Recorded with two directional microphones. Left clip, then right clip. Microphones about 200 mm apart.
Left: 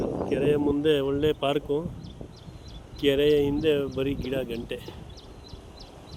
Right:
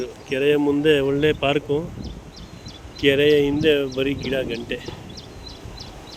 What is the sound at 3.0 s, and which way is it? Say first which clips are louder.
Speech: right 5 dB; 10° left (ahead or behind).